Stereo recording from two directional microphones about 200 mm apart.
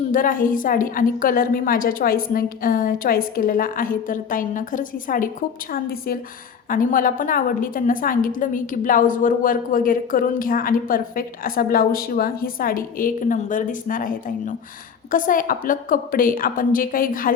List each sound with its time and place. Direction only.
0.1 s a woman's voice: 45° left (ahead or behind)
6.7 s a woman's voice: 45° left (ahead or behind)